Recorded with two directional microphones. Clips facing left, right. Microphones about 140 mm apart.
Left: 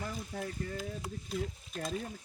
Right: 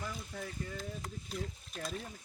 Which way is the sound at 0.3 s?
40° left (ahead or behind).